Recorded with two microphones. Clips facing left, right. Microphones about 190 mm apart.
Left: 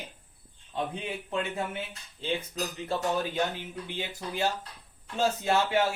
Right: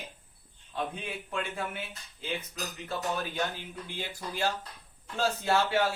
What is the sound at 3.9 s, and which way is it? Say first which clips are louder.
Speech: left 2 dB; 20° left (ahead or behind).